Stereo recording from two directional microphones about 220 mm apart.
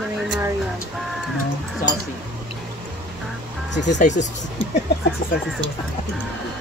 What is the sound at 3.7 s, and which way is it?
Speech, 50° left (ahead or behind).